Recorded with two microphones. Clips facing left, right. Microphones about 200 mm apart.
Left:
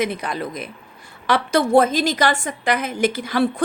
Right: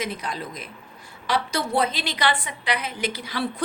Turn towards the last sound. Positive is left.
turn(degrees=50)  # may be behind; listen again after turning